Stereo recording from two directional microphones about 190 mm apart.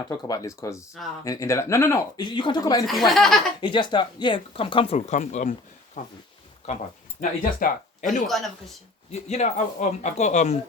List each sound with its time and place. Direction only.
0.1 s speech: 20° left (ahead or behind)
2.8 s speech: centre (ahead or behind)
3.6 s speech: 25° left (ahead or behind); by 6.0 s 40° left (ahead or behind)
7.2 s speech: 40° left (ahead or behind)
8.0 s speech: centre (ahead or behind)
9.1 s speech: 35° left (ahead or behind)